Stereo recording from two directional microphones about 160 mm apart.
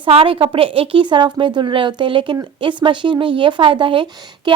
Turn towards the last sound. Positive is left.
turn(degrees=-30)  # may be behind; listen again after turning